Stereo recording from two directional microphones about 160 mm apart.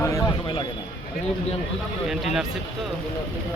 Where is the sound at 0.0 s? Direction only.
20° left (ahead or behind).